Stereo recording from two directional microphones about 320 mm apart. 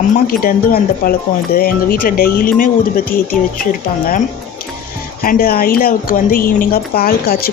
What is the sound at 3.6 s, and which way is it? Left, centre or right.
Speech, left.